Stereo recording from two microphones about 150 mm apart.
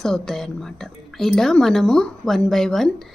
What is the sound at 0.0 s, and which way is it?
A woman's voice, centre (ahead or behind).